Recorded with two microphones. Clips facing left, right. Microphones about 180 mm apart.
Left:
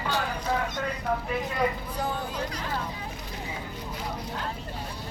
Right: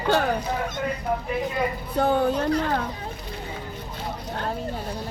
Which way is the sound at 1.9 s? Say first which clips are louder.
Right 10 dB; 65° right (ahead or behind).